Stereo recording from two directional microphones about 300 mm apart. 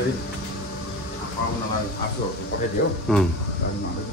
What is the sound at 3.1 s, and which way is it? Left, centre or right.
Speech, centre.